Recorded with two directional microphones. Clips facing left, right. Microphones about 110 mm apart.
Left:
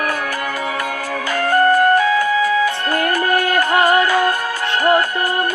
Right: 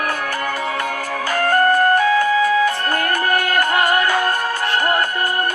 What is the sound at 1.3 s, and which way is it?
Music, 45° right (ahead or behind).